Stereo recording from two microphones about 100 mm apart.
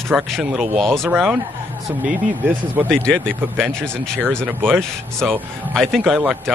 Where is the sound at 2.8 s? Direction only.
10° left (ahead or behind).